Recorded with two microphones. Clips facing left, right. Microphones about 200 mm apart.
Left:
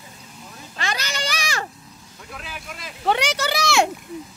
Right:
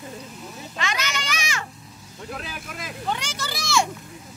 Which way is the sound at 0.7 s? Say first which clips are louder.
Left 1 dB; 35° left (ahead or behind).